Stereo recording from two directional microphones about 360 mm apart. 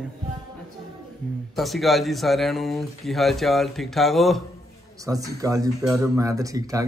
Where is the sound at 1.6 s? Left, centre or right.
Centre.